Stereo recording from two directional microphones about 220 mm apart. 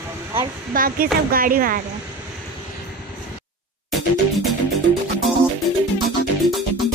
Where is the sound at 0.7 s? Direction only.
40° right (ahead or behind).